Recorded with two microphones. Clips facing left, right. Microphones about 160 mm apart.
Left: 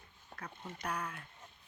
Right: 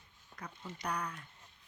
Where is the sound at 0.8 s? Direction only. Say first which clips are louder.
Right 1 dB; 5° left (ahead or behind).